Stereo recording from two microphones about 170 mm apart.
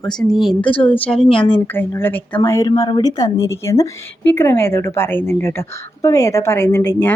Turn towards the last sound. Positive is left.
turn(degrees=15)  # may be behind; listen again after turning